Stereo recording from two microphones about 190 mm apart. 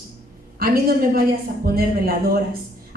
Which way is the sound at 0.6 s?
50° right (ahead or behind).